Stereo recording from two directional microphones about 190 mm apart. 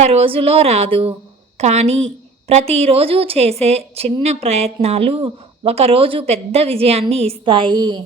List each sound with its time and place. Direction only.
0.0 s a woman's voice: 35° right (ahead or behind)